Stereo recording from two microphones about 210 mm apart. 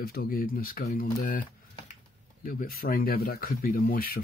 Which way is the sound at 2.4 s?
45° left (ahead or behind).